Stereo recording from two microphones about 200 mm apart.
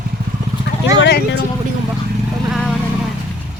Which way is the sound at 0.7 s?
55° left (ahead or behind).